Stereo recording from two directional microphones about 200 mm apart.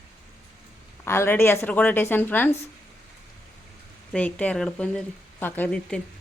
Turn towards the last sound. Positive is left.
turn(degrees=5)  # may be behind; listen again after turning